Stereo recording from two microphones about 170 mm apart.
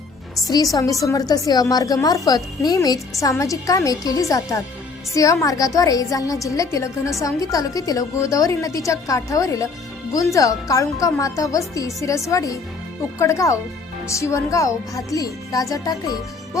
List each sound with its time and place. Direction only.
0.4 s a woman's voice: 20° left (ahead or behind)